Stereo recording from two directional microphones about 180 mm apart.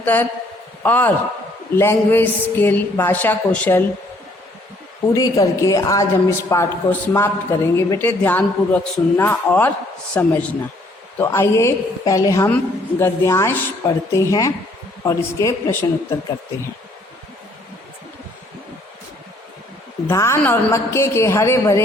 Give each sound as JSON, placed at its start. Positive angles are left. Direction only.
{"t": 0.0, "sound": "a man's voice", "side_deg": 10}
{"t": 5.1, "sound": "a woman's voice", "side_deg": 20}
{"t": 20.1, "sound": "a woman's voice", "side_deg": 15}